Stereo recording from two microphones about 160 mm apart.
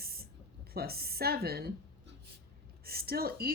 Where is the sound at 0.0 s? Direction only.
75° right (ahead or behind).